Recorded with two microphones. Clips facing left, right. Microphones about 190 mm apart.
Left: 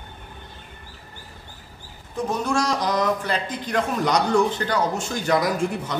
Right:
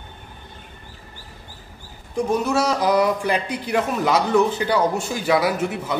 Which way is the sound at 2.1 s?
10° right (ahead or behind).